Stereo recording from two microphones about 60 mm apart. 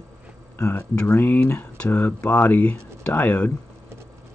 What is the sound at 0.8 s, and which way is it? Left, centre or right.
Speech, left.